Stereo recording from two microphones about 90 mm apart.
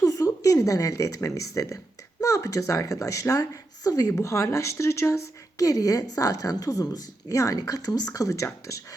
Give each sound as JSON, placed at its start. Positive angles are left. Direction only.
{"t": 0.0, "sound": "speech", "side_deg": 40}